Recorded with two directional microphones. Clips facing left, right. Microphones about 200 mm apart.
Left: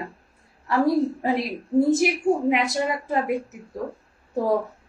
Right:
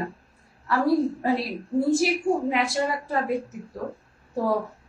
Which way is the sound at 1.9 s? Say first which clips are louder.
Left 2 dB; 20° left (ahead or behind).